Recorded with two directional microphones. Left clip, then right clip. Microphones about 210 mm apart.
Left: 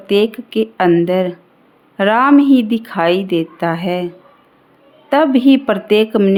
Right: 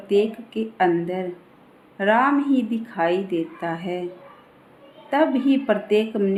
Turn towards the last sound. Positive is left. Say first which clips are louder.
# left 8 dB
turn(degrees=45)  # may be behind; listen again after turning